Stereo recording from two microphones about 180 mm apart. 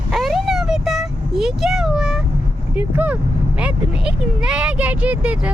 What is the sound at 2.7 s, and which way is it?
Speech, 10° right (ahead or behind).